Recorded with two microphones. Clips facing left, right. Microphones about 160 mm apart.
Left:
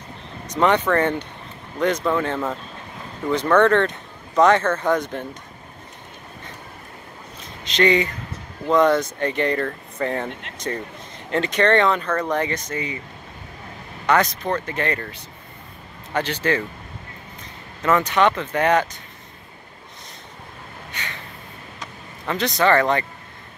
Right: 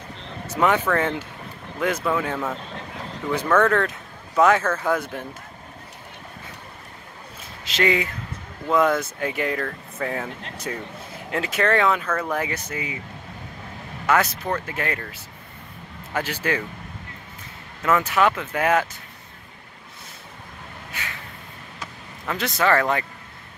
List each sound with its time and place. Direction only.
0.5 s speech: 5° right (ahead or behind)
7.6 s speech: 5° right (ahead or behind)
14.0 s speech: 5° right (ahead or behind)
17.8 s speech: 5° right (ahead or behind)
20.9 s a sound: 5° right (ahead or behind)
21.7 s vehicle: centre (ahead or behind)